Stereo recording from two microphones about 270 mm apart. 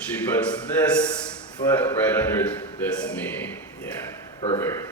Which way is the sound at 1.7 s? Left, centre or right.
Centre.